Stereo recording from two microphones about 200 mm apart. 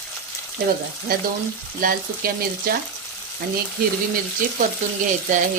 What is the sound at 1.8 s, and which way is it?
Speech, 45° right (ahead or behind).